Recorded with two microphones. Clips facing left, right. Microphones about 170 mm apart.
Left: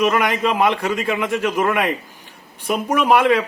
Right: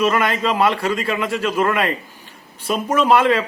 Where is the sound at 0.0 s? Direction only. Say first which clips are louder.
Even; 15° left (ahead or behind).